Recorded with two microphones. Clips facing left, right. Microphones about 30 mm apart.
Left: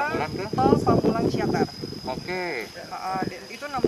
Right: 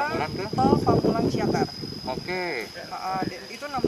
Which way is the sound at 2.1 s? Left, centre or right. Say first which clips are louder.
Even; centre.